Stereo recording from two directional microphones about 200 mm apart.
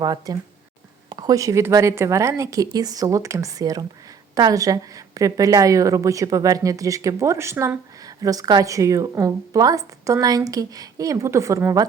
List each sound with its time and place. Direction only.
0.0 s a woman's voice: 20° right (ahead or behind)